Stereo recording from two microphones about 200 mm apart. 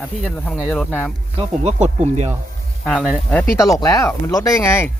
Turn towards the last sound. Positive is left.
turn(degrees=15)  # may be behind; listen again after turning